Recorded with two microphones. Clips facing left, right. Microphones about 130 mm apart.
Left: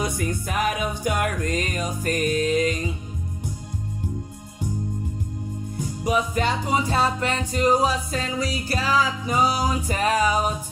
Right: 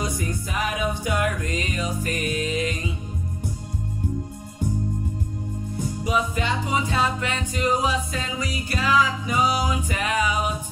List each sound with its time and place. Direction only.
0.0 s music: 60° left (ahead or behind); by 2.7 s 45° left (ahead or behind)
6.0 s music: 45° left (ahead or behind)